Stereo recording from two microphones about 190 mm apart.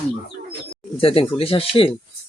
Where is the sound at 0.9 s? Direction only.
30° left (ahead or behind).